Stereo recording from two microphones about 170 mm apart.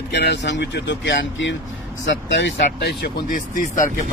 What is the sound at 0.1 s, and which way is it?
Speech, 85° left.